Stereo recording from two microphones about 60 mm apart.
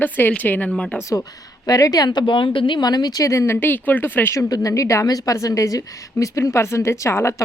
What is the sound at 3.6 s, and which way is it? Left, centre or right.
Speech, left.